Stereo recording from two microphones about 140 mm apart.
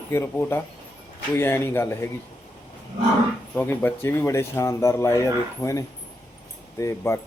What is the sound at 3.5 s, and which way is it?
Speech, 15° left (ahead or behind).